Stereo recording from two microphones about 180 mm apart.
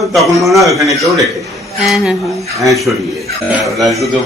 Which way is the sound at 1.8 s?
Centre (ahead or behind).